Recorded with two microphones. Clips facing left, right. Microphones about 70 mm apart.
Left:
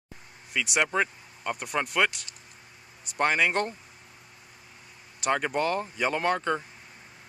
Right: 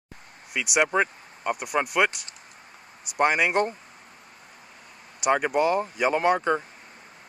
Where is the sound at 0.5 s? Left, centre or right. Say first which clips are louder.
Right 3 dB; centre.